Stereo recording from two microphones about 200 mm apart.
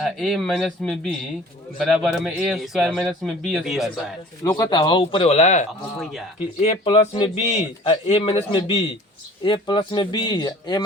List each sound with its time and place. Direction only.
0.0 s speech: centre (ahead or behind)
4.4 s a man's voice: 20° left (ahead or behind)